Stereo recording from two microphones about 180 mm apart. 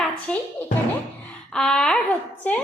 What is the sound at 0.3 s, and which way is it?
Speech, 5° left (ahead or behind).